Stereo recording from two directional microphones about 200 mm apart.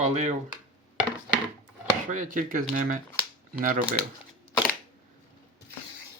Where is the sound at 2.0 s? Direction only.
40° right (ahead or behind).